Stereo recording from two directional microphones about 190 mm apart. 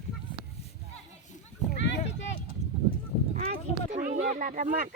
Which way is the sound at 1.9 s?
70° left (ahead or behind).